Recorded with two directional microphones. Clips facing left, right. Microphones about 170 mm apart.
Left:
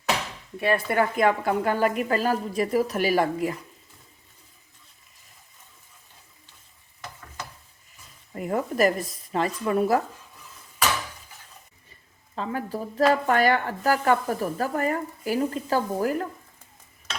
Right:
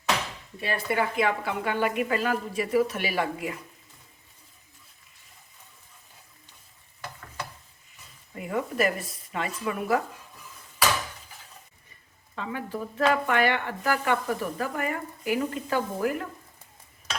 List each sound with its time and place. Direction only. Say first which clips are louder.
0.6 s speech: left 5 dB; 55° left (ahead or behind)
8.4 s speech: left 4 dB; 40° left (ahead or behind)
12.3 s speech: left 3 dB; 35° left (ahead or behind)